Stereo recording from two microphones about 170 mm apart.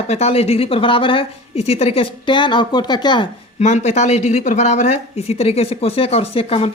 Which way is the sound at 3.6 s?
45° left (ahead or behind).